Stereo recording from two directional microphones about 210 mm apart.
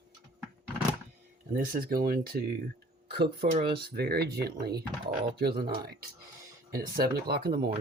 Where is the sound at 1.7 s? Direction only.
45° right (ahead or behind).